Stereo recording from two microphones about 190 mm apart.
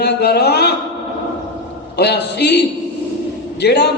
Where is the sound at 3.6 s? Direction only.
60° left (ahead or behind).